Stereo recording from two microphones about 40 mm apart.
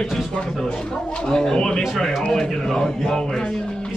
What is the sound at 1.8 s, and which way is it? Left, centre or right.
Speech, centre.